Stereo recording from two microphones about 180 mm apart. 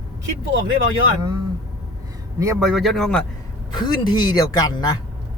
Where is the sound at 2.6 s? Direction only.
Centre (ahead or behind).